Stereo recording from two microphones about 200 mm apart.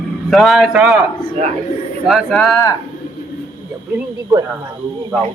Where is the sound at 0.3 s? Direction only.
Centre (ahead or behind).